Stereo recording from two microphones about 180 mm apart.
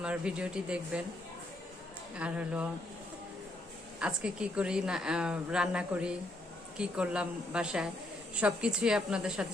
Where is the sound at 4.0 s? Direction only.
5° right (ahead or behind).